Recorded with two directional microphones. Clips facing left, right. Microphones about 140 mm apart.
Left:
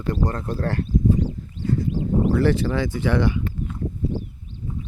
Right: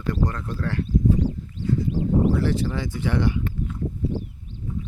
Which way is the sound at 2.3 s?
65° left (ahead or behind).